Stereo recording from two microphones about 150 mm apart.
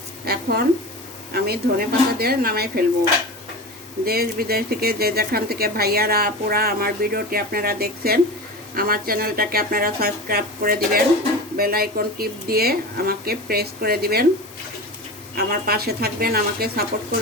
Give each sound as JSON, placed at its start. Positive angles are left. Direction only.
{"t": 0.3, "sound": "speech", "side_deg": -90}
{"t": 4.0, "sound": "speech", "side_deg": -90}
{"t": 8.7, "sound": "speech", "side_deg": -80}
{"t": 15.4, "sound": "speech", "side_deg": -90}